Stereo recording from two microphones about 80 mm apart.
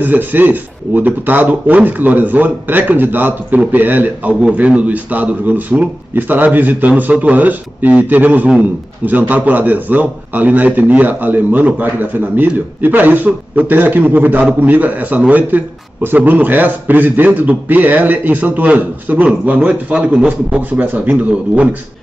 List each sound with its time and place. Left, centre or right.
0.0 s a man's voice: right